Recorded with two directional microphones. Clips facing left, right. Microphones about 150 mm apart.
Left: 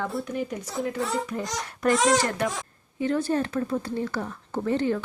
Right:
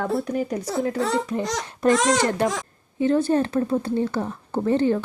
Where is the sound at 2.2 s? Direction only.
30° right (ahead or behind).